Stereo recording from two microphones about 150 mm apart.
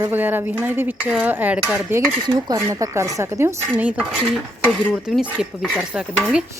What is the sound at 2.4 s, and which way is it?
Speech, 20° right (ahead or behind).